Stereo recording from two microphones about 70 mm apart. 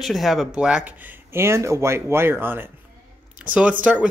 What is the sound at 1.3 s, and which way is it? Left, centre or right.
Speech, right.